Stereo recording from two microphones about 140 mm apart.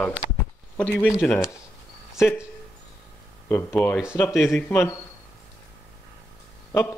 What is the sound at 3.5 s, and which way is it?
Speech, 15° left (ahead or behind).